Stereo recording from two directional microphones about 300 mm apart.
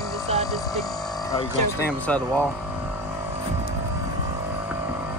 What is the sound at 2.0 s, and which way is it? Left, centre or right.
Speech, centre.